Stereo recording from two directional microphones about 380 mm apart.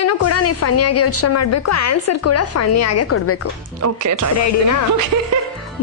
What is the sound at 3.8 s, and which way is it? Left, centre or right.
Speech, right.